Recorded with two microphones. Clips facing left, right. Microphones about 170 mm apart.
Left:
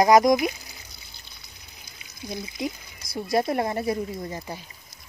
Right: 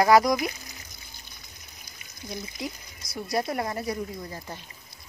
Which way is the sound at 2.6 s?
20° left (ahead or behind).